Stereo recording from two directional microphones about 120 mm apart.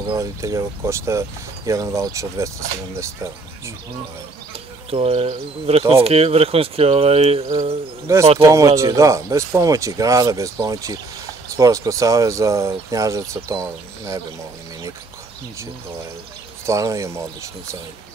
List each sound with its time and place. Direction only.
0.2 s speech: 25° right (ahead or behind)
4.9 s speech: 55° right (ahead or behind)
8.1 s speech: 25° right (ahead or behind)
16.6 s speech: 25° right (ahead or behind)